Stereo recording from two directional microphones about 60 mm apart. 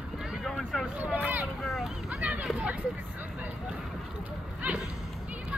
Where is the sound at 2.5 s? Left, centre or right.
Right.